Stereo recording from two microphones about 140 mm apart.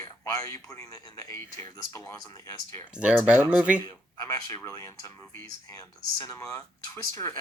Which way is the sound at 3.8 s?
25° left (ahead or behind).